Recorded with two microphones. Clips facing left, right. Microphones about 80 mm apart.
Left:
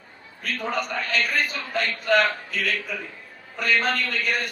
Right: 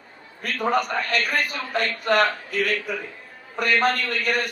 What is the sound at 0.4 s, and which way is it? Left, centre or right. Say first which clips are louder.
A man's voice: right 5 dB; right.